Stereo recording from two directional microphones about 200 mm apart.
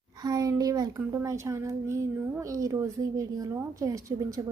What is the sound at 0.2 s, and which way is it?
A woman's voice, 20° right (ahead or behind).